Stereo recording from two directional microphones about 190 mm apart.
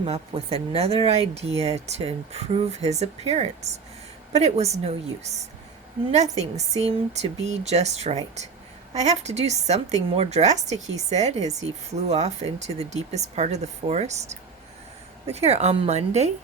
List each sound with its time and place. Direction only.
0.0 s speech: 30° right (ahead or behind)